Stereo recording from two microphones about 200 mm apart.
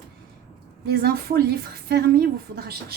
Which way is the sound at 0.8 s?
50° right (ahead or behind).